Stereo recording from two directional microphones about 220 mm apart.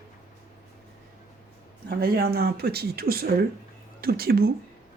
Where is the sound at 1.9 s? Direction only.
45° right (ahead or behind).